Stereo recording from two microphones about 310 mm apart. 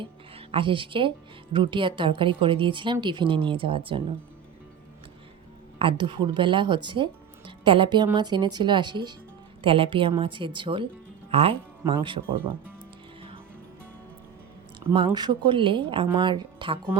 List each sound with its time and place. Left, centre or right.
0.0 s speech: centre
5.8 s speech: centre
14.8 s speech: centre